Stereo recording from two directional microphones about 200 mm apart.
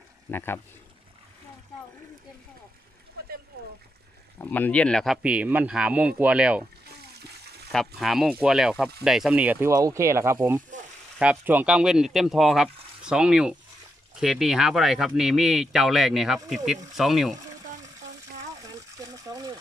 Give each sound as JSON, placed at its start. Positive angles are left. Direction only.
{"t": 0.3, "sound": "speech", "side_deg": 10}
{"t": 4.4, "sound": "speech", "side_deg": 10}
{"t": 7.2, "sound": "water", "side_deg": -55}
{"t": 7.7, "sound": "speech", "side_deg": 0}
{"t": 18.6, "sound": "a sound", "side_deg": -15}